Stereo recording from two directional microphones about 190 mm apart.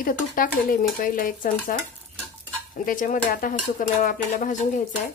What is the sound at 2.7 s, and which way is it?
Speech, 45° left (ahead or behind).